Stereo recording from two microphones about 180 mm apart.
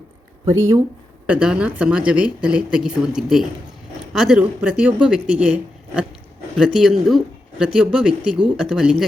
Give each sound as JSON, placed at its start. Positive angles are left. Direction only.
{"t": 0.4, "sound": "speech", "side_deg": -15}
{"t": 1.3, "sound": "speech", "side_deg": -5}
{"t": 6.6, "sound": "speech", "side_deg": -5}